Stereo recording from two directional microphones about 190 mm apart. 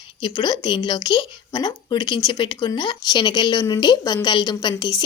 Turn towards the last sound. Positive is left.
turn(degrees=25)  # may be behind; listen again after turning